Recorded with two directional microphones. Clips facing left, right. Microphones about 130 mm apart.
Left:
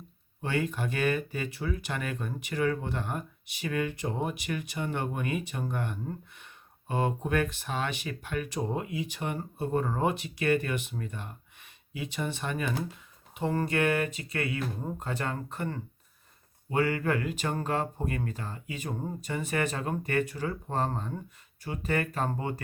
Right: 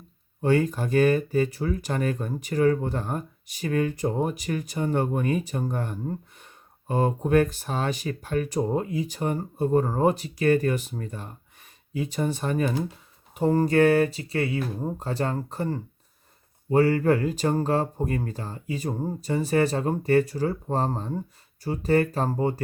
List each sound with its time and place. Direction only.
0.4 s speech: 40° right (ahead or behind)